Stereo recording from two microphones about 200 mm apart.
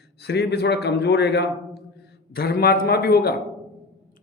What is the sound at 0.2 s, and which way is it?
Speech, 55° left (ahead or behind).